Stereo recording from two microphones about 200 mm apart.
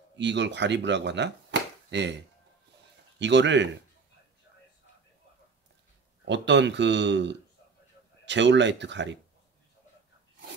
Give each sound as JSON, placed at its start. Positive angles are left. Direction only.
{"t": 0.2, "sound": "speech", "side_deg": -60}
{"t": 6.2, "sound": "speech", "side_deg": -65}